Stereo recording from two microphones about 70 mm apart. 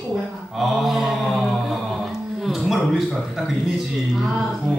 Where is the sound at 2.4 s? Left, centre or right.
Centre.